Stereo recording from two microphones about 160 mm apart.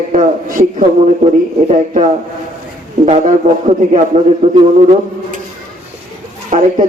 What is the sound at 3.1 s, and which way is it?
Speech, 45° right (ahead or behind).